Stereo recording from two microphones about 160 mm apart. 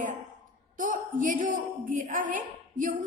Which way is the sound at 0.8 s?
55° right (ahead or behind).